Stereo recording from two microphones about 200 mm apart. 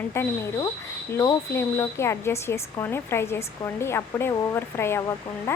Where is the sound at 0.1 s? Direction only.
15° left (ahead or behind).